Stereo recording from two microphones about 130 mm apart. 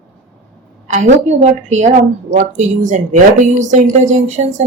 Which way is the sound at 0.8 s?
60° right (ahead or behind).